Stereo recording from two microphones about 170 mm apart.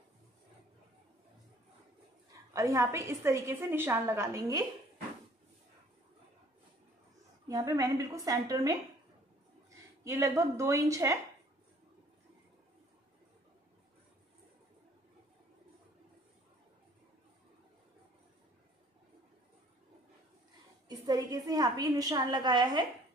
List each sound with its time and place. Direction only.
2.5 s a woman's voice: 15° right (ahead or behind)
7.4 s a woman's voice: 20° right (ahead or behind)
10.0 s a woman's voice: 15° right (ahead or behind)
21.0 s a woman's voice: 20° right (ahead or behind)